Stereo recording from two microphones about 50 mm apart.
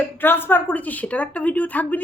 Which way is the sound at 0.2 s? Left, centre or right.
Left.